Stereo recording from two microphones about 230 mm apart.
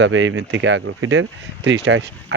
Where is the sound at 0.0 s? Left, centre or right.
Right.